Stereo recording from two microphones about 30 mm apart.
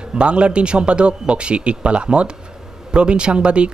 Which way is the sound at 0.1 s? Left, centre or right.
Right.